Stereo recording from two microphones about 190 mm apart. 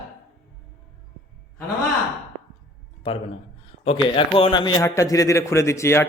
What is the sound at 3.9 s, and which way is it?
A man's voice, 30° left (ahead or behind).